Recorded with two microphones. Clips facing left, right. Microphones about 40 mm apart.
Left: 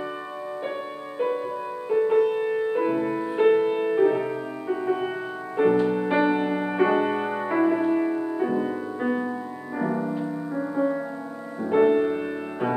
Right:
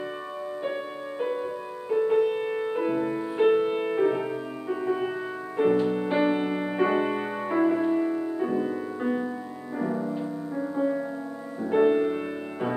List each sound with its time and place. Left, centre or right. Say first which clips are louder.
1.2 s music: left 4 dB; centre
2.8 s music: left 2 dB; centre
9.8 s music: left 2 dB; left